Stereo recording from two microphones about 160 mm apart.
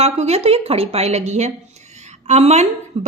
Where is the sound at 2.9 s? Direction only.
45° right (ahead or behind).